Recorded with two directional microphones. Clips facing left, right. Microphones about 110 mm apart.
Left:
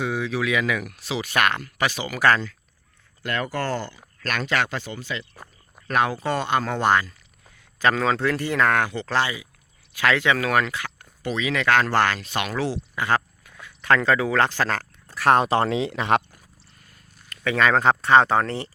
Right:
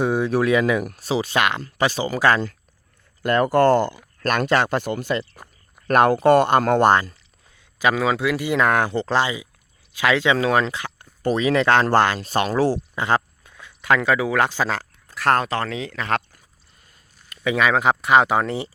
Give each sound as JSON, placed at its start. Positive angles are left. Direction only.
{"t": 0.0, "sound": "speech", "side_deg": -45}
{"t": 3.2, "sound": "speech", "side_deg": -45}
{"t": 4.2, "sound": "speech", "side_deg": -40}
{"t": 4.7, "sound": "speech", "side_deg": -55}
{"t": 6.9, "sound": "speech", "side_deg": -35}
{"t": 7.8, "sound": "speech", "side_deg": -10}
{"t": 8.8, "sound": "speech", "side_deg": -30}
{"t": 9.1, "sound": "speech", "side_deg": -20}
{"t": 11.2, "sound": "speech", "side_deg": -40}
{"t": 12.2, "sound": "speech", "side_deg": -35}
{"t": 13.0, "sound": "a sound", "side_deg": -25}
{"t": 13.8, "sound": "speech", "side_deg": -10}
{"t": 15.4, "sound": "speech", "side_deg": 25}
{"t": 17.2, "sound": "speech", "side_deg": -10}